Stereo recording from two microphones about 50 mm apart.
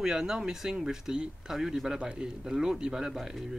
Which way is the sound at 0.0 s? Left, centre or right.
Centre.